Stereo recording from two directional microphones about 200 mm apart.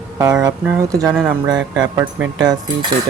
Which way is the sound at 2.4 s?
20° right (ahead or behind).